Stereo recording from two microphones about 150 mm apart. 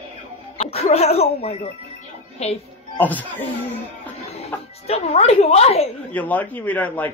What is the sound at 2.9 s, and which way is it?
Speech, 10° left (ahead or behind).